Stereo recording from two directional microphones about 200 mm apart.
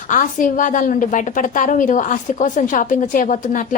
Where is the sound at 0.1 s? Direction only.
40° left (ahead or behind).